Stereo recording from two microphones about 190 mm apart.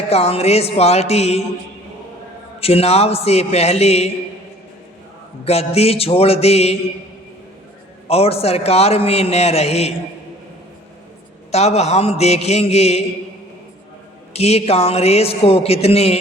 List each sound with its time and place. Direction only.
0.1 s a man's voice: 35° left (ahead or behind)
2.6 s a man's voice: 30° left (ahead or behind)
5.5 s a man's voice: 35° left (ahead or behind)
8.0 s a man's voice: 30° left (ahead or behind)
11.5 s a man's voice: 35° left (ahead or behind)
14.3 s a man's voice: 35° left (ahead or behind)